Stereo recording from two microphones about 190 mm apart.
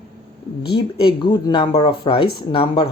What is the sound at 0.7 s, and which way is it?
A man's voice, 25° left (ahead or behind).